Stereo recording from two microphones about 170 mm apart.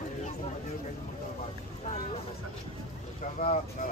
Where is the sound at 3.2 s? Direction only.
45° left (ahead or behind).